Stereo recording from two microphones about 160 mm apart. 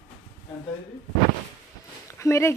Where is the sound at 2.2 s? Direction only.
15° left (ahead or behind).